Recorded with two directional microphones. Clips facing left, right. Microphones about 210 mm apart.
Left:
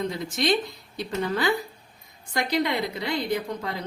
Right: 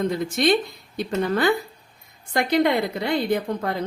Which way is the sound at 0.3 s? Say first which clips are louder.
Right 2 dB; 55° right (ahead or behind).